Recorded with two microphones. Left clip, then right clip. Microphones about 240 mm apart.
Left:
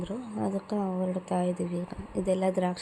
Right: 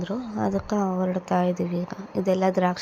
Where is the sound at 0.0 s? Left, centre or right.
Centre.